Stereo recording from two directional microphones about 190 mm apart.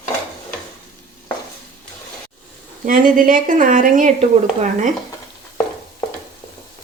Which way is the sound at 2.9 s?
45° right (ahead or behind).